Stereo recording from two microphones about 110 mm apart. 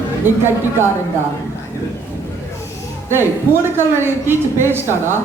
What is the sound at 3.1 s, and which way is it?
A woman's voice, 20° right (ahead or behind).